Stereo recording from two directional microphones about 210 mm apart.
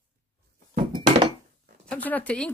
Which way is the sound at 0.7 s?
25° right (ahead or behind).